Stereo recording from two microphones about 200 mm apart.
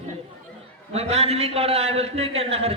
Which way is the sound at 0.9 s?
30° right (ahead or behind).